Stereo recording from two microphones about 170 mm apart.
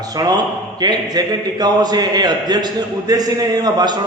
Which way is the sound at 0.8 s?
25° right (ahead or behind).